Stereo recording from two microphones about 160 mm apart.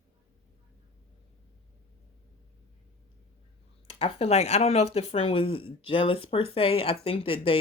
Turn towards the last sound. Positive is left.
turn(degrees=35)  # may be behind; listen again after turning